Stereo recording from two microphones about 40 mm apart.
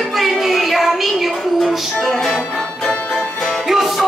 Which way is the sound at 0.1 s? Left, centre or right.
Centre.